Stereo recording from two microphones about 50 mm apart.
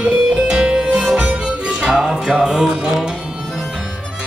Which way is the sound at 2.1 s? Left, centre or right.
Centre.